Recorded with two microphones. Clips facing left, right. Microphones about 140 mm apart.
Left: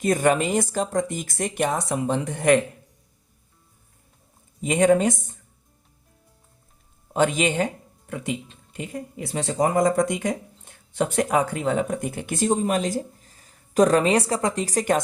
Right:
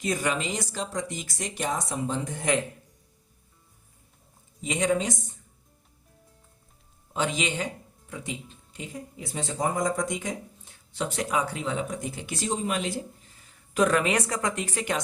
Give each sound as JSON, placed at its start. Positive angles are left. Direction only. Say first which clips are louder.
{"t": 0.0, "sound": "speech", "louder": "left 8 dB", "side_deg": 50}
{"t": 4.6, "sound": "speech", "louder": "left 8 dB", "side_deg": 50}
{"t": 7.1, "sound": "speech", "louder": "left 7 dB", "side_deg": 50}
{"t": 8.1, "sound": "speech", "louder": "left 7 dB", "side_deg": 70}